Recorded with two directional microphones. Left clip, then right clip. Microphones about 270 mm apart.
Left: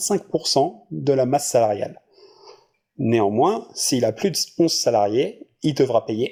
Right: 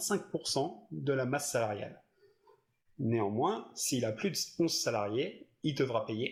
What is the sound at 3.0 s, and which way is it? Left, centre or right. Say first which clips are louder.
Speech: left 14 dB; left.